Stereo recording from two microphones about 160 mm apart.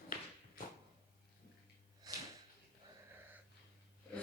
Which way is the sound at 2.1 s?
25° right (ahead or behind).